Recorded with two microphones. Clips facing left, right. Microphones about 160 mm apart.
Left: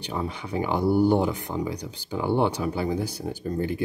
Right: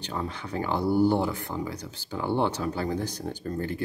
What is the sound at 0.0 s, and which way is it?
Speech, 10° left (ahead or behind).